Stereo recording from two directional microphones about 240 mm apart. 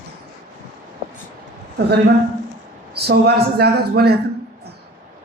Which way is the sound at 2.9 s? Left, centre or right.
Right.